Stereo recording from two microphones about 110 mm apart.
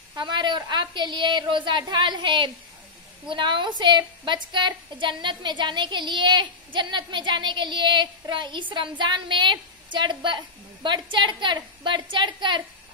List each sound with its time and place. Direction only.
0.1 s a woman's voice: 45° right (ahead or behind)